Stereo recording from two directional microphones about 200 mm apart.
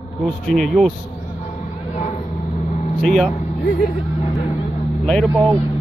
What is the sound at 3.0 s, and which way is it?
Speech, 5° left (ahead or behind).